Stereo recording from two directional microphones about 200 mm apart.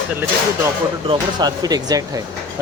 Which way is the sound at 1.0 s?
25° right (ahead or behind).